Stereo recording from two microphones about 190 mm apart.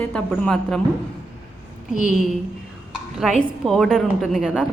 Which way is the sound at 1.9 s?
40° left (ahead or behind).